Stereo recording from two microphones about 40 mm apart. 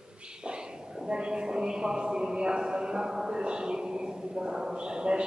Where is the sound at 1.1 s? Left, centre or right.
Right.